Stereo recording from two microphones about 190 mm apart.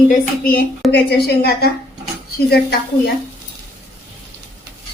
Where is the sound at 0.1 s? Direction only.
50° left (ahead or behind).